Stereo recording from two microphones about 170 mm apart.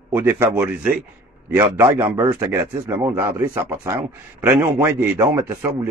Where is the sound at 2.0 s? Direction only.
20° right (ahead or behind).